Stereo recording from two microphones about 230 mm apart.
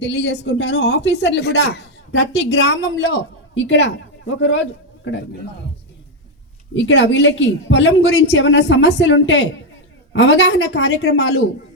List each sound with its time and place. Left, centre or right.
0.0 s a woman's voice: left
6.7 s a woman's voice: left